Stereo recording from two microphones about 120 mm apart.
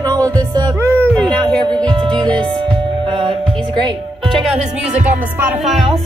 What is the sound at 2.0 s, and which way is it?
Music, 5° left (ahead or behind).